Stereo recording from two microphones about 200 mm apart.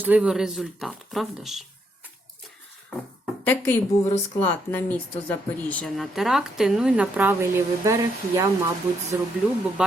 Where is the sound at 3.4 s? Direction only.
10° left (ahead or behind).